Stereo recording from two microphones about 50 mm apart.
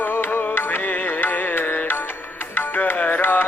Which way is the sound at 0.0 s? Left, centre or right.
Left.